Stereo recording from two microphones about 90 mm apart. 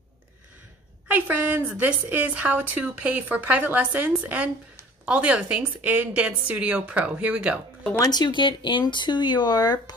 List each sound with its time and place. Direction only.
1.0 s a woman's voice: 20° right (ahead or behind)
8.0 s speech: 50° left (ahead or behind)